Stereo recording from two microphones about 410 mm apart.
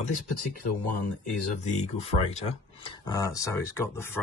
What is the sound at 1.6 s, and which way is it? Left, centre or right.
Speech, centre.